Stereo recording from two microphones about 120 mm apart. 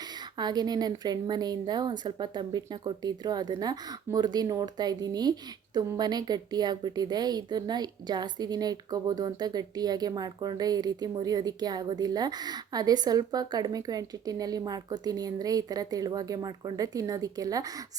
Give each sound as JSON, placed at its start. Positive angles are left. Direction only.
{"t": 0.0, "sound": "a woman's voice", "side_deg": -35}